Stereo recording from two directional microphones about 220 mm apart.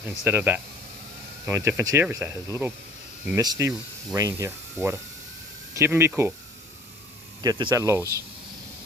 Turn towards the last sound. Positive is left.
turn(degrees=-15)  # may be behind; listen again after turning